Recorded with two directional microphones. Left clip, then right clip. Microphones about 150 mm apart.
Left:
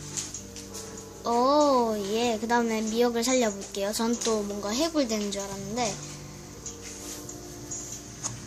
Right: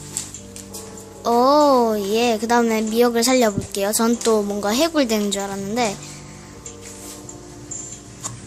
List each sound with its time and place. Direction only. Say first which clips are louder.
1.2 s a child's voice: right 8 dB; 35° right (ahead or behind)